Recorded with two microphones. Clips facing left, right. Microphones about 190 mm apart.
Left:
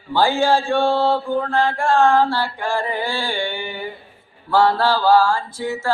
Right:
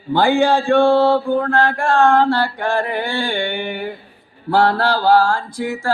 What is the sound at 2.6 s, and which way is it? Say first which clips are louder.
Mantra: right 3 dB; 60° right (ahead or behind).